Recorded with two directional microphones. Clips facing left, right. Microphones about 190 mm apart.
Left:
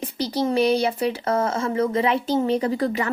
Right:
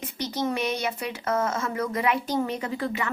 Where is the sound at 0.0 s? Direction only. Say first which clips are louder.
Left 5 dB; 35° left (ahead or behind).